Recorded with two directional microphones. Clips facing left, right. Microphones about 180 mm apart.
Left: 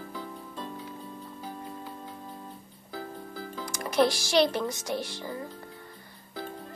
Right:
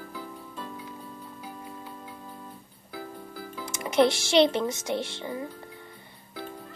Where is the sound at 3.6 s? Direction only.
20° right (ahead or behind).